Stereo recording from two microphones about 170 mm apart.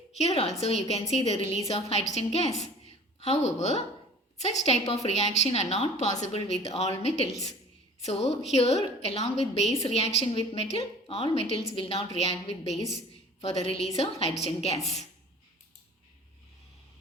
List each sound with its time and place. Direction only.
0.2 s a woman's voice: 35° left (ahead or behind)